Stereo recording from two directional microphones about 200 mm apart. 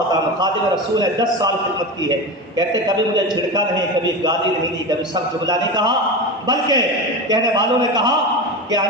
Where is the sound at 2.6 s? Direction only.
20° right (ahead or behind).